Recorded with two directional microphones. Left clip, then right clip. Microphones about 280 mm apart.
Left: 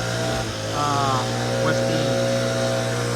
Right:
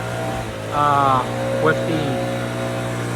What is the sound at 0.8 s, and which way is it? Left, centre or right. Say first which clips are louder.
Speech: right 7 dB; centre.